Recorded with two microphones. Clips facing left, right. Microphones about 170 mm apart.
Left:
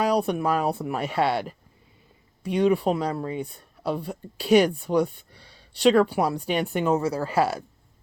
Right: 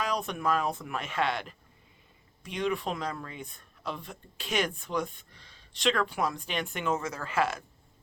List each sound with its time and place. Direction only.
0.0 s speech: 35° left (ahead or behind)